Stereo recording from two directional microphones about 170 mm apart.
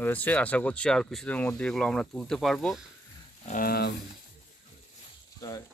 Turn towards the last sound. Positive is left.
turn(degrees=20)  # may be behind; listen again after turning